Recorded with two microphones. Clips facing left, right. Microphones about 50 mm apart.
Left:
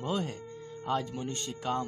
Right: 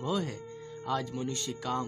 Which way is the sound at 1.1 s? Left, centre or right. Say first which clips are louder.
Right 2 dB; centre.